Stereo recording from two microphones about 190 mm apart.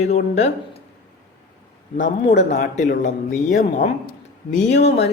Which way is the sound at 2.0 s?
35° left (ahead or behind).